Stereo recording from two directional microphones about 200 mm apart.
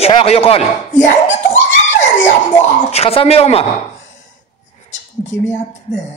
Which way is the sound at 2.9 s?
30° left (ahead or behind).